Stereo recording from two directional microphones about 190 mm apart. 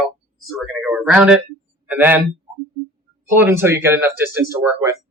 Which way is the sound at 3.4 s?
10° right (ahead or behind).